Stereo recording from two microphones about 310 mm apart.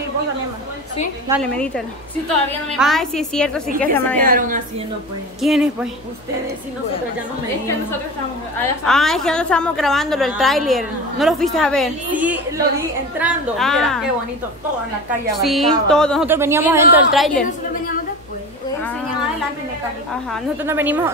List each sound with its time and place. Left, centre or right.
1.3 s a woman's voice: centre
2.8 s a woman's voice: centre
4.2 s a woman's voice: right
5.4 s a woman's voice: centre
8.5 s a woman's voice: centre
15.4 s a woman's voice: centre
20.2 s a woman's voice: centre